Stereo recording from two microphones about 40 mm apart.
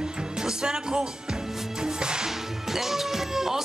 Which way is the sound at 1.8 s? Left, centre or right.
Centre.